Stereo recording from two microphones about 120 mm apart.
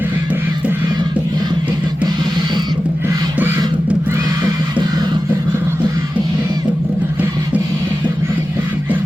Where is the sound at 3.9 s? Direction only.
20° right (ahead or behind).